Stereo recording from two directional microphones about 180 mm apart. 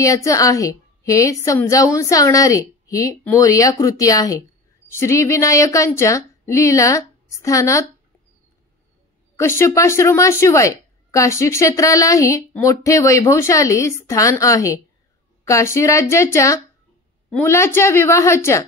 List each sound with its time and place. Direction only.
0.0 s a woman's voice: 20° left (ahead or behind)
9.4 s a woman's voice: 15° left (ahead or behind)